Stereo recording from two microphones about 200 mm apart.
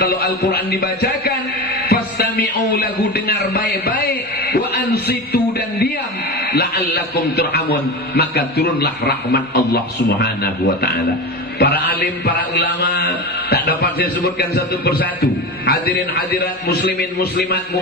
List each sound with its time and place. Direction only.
0.0 s a man's voice: 50° left (ahead or behind)